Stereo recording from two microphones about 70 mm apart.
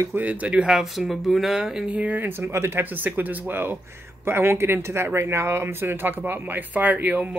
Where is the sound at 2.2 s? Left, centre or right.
Right.